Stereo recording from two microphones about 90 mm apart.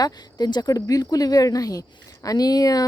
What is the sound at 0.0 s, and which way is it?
Speech, 50° left (ahead or behind).